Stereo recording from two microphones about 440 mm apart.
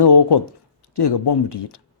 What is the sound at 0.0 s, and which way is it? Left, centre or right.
Speech, left.